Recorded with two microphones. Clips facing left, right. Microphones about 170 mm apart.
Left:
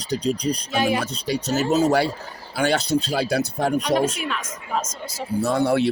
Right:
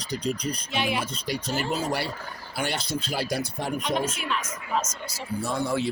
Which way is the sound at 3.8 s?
75° left (ahead or behind).